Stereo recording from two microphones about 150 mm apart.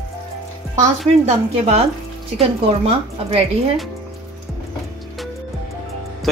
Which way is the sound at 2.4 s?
40° right (ahead or behind).